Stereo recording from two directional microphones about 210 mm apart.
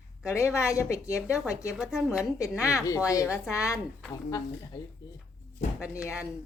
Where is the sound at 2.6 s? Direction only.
15° left (ahead or behind).